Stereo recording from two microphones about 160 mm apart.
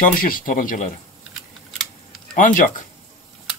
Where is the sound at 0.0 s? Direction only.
60° left (ahead or behind).